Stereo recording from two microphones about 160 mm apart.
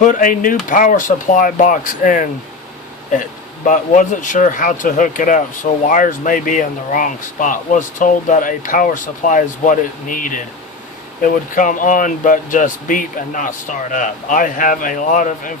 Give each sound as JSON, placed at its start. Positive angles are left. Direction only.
{"t": 0.0, "sound": "speech", "side_deg": 55}
{"t": 3.7, "sound": "speech", "side_deg": 50}